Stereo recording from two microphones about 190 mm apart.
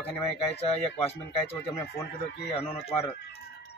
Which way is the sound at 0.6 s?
30° left (ahead or behind).